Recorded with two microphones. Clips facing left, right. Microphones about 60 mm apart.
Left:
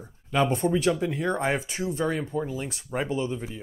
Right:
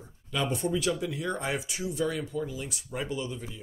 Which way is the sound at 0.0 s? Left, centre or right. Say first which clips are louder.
Left 7 dB; left.